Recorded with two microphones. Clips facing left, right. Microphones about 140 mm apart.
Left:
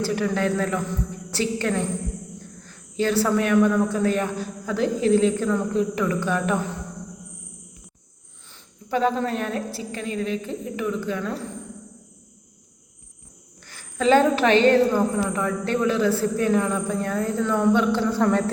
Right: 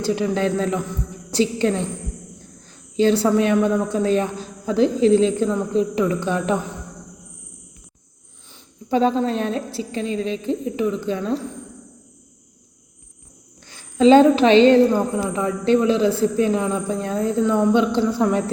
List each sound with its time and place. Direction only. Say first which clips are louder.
0.0 s a woman's voice: right 3 dB; 20° right (ahead or behind)
3.0 s a woman's voice: right 4 dB; 20° right (ahead or behind)
8.5 s a woman's voice: right 5 dB; 25° right (ahead or behind)
13.7 s a woman's voice: right 6 dB; 20° right (ahead or behind)